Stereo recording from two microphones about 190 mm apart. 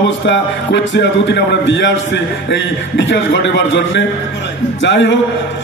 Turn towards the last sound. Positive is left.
turn(degrees=70)  # may be behind; listen again after turning